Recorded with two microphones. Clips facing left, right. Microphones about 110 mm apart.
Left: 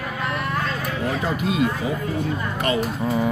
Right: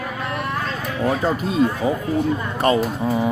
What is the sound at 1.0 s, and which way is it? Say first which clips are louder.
Speech: right 4 dB; 35° right (ahead or behind).